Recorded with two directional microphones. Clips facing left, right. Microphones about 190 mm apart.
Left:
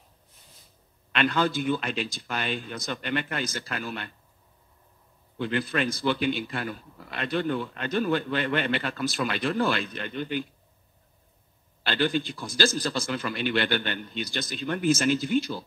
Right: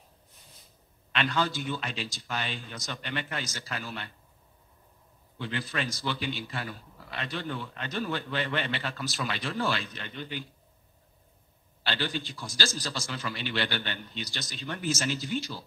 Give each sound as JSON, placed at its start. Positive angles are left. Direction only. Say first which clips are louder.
{"t": 1.1, "sound": "a man's voice", "louder": "left 4 dB", "side_deg": 55}
{"t": 5.4, "sound": "a man's voice", "louder": "left 6 dB", "side_deg": 55}
{"t": 11.8, "sound": "a man's voice", "louder": "left 7 dB", "side_deg": 55}